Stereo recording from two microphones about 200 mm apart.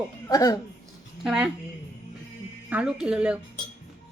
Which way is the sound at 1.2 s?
Centre (ahead or behind).